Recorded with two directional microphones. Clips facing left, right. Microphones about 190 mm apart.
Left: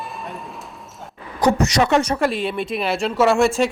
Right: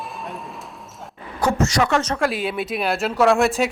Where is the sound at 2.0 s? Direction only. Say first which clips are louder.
Left 2 dB; 10° left (ahead or behind).